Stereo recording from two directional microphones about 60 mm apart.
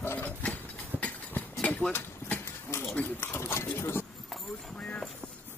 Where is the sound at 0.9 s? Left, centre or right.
Right.